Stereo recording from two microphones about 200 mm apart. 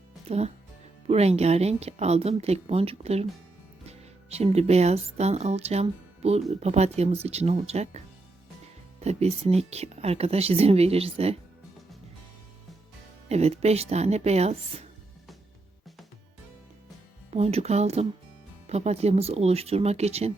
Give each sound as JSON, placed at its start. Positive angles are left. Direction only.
{"t": 0.3, "sound": "speech", "side_deg": -30}
{"t": 13.2, "sound": "speech", "side_deg": -30}
{"t": 17.3, "sound": "speech", "side_deg": -30}